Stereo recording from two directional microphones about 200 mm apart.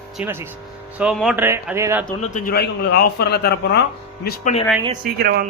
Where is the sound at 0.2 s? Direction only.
10° right (ahead or behind).